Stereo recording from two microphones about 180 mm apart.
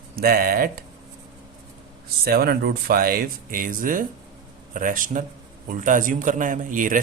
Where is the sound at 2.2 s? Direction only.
55° right (ahead or behind).